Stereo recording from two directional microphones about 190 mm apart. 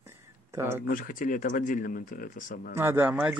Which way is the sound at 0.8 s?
45° left (ahead or behind).